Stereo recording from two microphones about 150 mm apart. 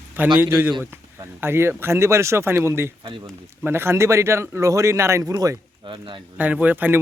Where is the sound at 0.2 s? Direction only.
15° right (ahead or behind); by 6.2 s 35° right (ahead or behind).